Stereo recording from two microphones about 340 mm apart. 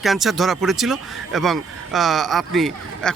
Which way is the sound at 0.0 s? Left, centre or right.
Centre.